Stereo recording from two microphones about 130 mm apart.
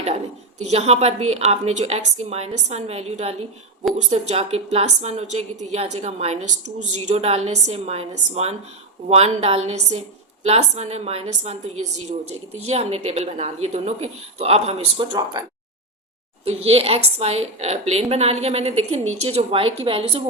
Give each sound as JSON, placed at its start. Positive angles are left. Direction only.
{"t": 0.6, "sound": "a woman's voice", "side_deg": -55}
{"t": 15.3, "sound": "a sound", "side_deg": -30}
{"t": 16.4, "sound": "a woman's voice", "side_deg": -50}